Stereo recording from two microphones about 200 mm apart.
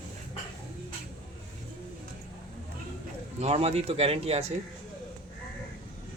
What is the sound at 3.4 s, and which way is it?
Speech, 30° right (ahead or behind).